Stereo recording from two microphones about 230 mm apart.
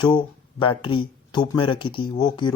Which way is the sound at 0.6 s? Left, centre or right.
Left.